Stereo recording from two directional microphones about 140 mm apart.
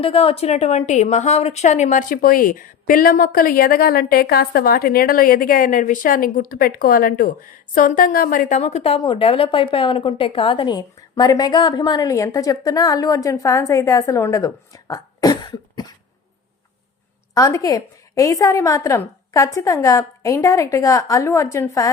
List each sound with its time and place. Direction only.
0.0 s a woman's voice: 45° left (ahead or behind); by 8.5 s 90° left
8.5 s speech: 50° left (ahead or behind); by 16.0 s 30° left (ahead or behind)
17.3 s a woman's voice: 25° left (ahead or behind)